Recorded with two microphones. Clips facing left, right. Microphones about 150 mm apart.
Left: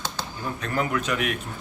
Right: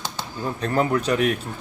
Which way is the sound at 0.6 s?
35° right (ahead or behind).